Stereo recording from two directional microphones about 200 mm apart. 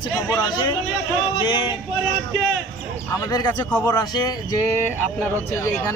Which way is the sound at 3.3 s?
20° left (ahead or behind).